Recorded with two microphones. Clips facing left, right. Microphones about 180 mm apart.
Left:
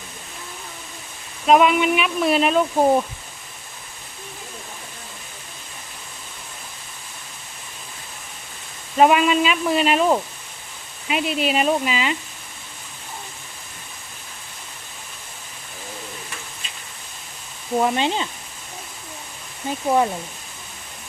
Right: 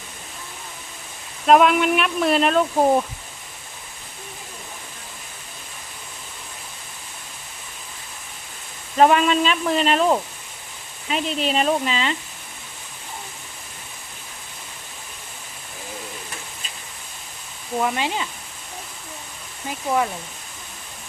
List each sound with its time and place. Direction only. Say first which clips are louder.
1.5 s speech: even; centre (ahead or behind)
9.0 s speech: even; 10° left (ahead or behind)
17.7 s speech: left 3 dB; 25° left (ahead or behind)